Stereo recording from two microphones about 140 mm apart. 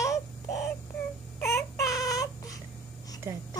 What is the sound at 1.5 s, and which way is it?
Baby cry, 25° left (ahead or behind).